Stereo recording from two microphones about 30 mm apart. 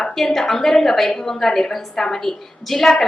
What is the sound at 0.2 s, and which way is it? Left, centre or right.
A woman's voice, centre.